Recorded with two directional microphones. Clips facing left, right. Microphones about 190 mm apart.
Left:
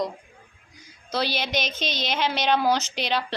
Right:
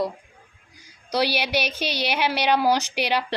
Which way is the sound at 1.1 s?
10° right (ahead or behind).